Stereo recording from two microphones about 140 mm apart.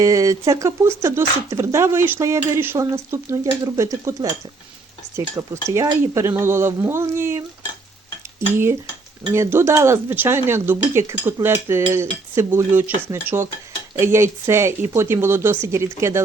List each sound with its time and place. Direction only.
0.0 s speech: 25° right (ahead or behind)
5.6 s speech: 20° right (ahead or behind)